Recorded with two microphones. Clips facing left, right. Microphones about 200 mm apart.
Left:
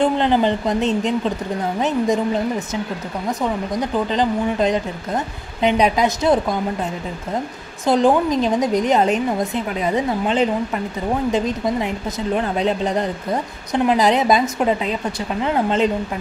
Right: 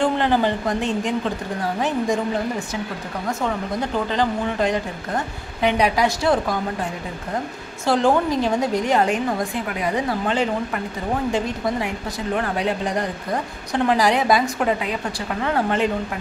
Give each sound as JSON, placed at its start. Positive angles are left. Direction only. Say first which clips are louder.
{"t": 0.0, "sound": "a woman's voice", "louder": "left 2 dB", "side_deg": 20}
{"t": 4.1, "sound": "a woman's voice", "louder": "left 3 dB", "side_deg": 20}
{"t": 7.8, "sound": "a woman's voice", "louder": "left 3 dB", "side_deg": 20}